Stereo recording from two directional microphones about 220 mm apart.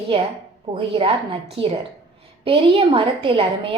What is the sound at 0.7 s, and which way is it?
A woman's voice, 25° right (ahead or behind).